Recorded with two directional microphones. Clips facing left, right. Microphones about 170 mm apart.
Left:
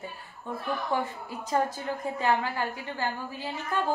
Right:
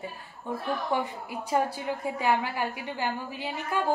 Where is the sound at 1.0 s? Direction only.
10° right (ahead or behind).